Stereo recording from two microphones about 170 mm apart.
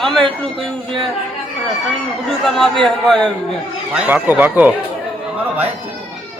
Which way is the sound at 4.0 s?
10° right (ahead or behind).